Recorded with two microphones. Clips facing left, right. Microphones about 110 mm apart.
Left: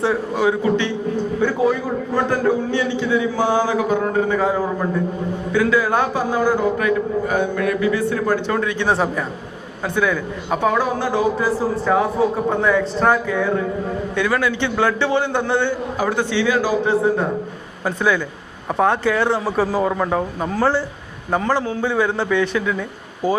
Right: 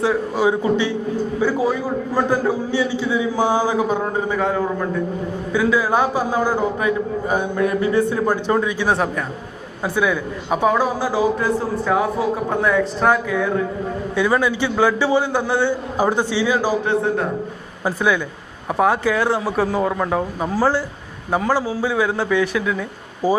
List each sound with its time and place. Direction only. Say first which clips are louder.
0.0 s a man's voice: right 1 dB; centre (ahead or behind)
0.4 s a man's voice: even; 15° right (ahead or behind)
4.4 s a man's voice: left 1 dB; 5° left (ahead or behind)
5.5 s a man's voice: left 1 dB; 10° right (ahead or behind); by 8.0 s 25° right (ahead or behind)
8.1 s a man's voice: right 1 dB; 15° right (ahead or behind)
8.9 s a man's voice: left 1 dB; centre (ahead or behind)
14.2 s a man's voice: right 2 dB; 15° right (ahead or behind)
16.0 s a man's voice: right 2 dB; 15° right (ahead or behind)
16.8 s a man's voice: left 2 dB; 5° left (ahead or behind)